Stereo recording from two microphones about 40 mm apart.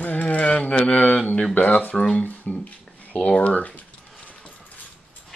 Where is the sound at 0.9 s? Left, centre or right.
Left.